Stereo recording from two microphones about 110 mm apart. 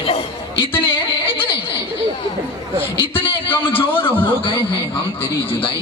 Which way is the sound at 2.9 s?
55° left (ahead or behind).